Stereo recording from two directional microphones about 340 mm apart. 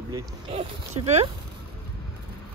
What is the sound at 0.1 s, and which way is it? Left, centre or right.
Speech, centre.